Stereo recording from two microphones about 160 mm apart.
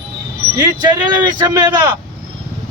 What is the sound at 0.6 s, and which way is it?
Speech, 25° right (ahead or behind).